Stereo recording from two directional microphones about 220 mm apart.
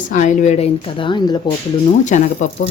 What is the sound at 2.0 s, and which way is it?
Speech, 35° left (ahead or behind).